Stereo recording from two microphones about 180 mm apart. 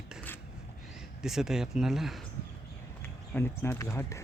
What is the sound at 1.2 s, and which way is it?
Speech, centre (ahead or behind).